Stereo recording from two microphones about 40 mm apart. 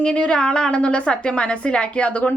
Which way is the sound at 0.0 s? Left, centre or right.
Left.